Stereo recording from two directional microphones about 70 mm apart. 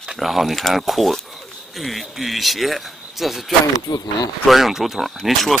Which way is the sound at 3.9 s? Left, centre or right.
Left.